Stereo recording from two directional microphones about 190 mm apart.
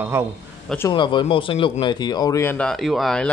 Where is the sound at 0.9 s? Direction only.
25° left (ahead or behind); by 3.2 s centre (ahead or behind).